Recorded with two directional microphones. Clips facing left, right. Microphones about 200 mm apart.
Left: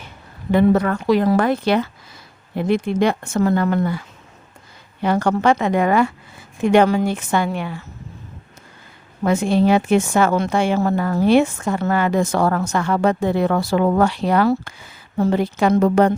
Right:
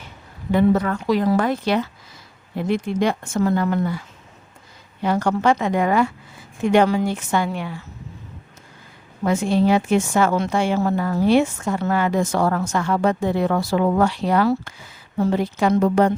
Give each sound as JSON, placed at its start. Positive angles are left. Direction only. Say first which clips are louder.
{"t": 0.5, "sound": "a woman's voice", "louder": "left 2 dB", "side_deg": 60}
{"t": 5.0, "sound": "a woman's voice", "louder": "left 2 dB", "side_deg": 65}
{"t": 9.2, "sound": "a woman's voice", "louder": "left 2 dB", "side_deg": 60}